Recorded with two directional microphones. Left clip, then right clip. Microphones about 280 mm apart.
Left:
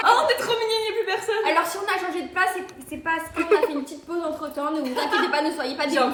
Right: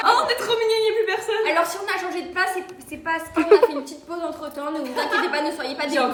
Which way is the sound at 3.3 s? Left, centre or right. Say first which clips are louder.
Right 6 dB; right.